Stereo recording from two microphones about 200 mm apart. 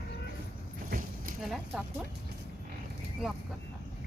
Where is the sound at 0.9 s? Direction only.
45° right (ahead or behind).